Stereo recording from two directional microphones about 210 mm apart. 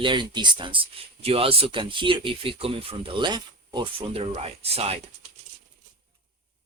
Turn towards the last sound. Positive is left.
turn(degrees=-30)  # may be behind; listen again after turning